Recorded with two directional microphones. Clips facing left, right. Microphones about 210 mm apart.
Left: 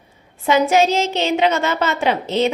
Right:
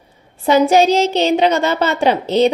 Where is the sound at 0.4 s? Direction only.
35° right (ahead or behind).